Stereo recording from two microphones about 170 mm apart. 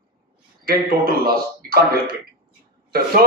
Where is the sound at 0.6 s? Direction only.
60° right (ahead or behind).